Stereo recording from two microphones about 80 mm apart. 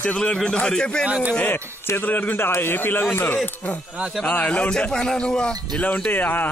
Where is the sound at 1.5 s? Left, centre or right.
Left.